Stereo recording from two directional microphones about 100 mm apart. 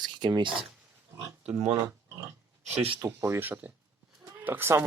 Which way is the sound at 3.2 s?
25° right (ahead or behind).